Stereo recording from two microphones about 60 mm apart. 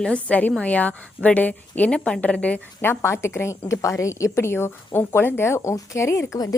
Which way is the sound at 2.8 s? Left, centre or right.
Left.